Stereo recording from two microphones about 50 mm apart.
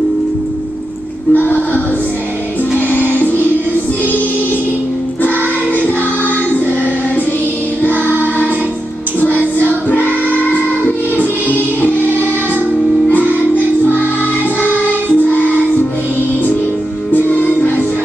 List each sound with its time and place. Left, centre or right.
1.3 s music: left
2.9 s music: left
6.2 s music: left
7.9 s music: right
9.2 s music: left
11.1 s music: left
17.1 s music: left